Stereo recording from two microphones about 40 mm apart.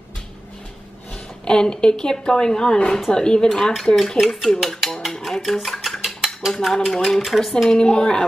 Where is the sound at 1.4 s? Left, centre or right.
Centre.